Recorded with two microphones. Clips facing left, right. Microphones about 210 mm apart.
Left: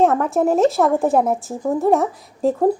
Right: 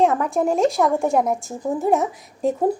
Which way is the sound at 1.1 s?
35° left (ahead or behind).